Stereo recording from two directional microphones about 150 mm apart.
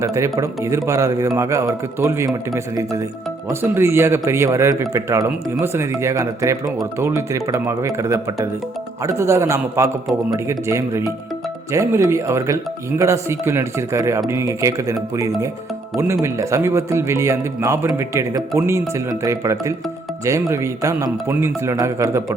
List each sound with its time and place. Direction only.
0.0 s speech: 20° right (ahead or behind)